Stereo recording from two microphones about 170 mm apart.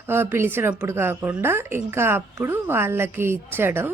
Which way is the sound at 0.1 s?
15° right (ahead or behind).